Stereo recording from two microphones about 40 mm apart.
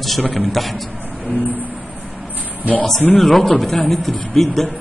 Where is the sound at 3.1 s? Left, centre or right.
Centre.